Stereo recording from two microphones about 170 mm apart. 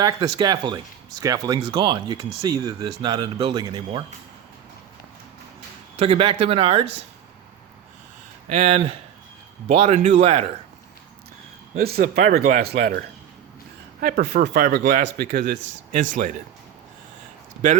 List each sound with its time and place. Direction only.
0.3 s speech: 25° right (ahead or behind)
6.0 s speech: 35° right (ahead or behind)
8.5 s speech: 40° right (ahead or behind)
11.8 s speech: 60° right (ahead or behind)
14.0 s speech: 60° right (ahead or behind)
14.7 s speech: 65° right (ahead or behind)
16.0 s speech: 50° right (ahead or behind)
17.6 s speech: 50° right (ahead or behind)